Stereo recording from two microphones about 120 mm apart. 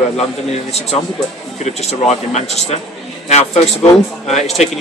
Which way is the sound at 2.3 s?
65° left (ahead or behind).